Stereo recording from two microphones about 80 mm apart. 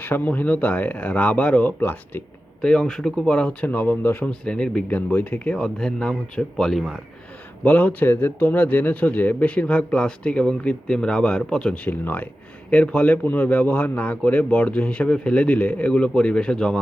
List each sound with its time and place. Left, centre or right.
0.0 s speech: left
2.6 s a man's voice: centre; by 4.3 s left
4.3 s a man's voice: centre
7.6 s a man's voice: centre
11.9 s a man's voice: left